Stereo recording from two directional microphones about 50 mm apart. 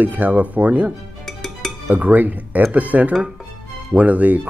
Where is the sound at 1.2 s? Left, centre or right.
Centre.